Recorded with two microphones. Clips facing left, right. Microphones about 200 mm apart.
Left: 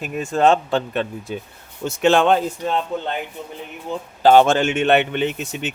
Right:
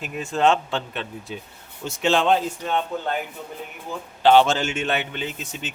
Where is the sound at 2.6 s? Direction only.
30° left (ahead or behind).